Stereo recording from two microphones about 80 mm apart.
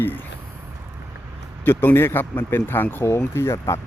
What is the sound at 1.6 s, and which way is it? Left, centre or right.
Speech, left.